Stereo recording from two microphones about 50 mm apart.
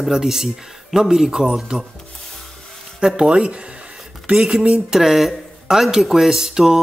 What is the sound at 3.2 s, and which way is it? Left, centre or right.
Speech, centre.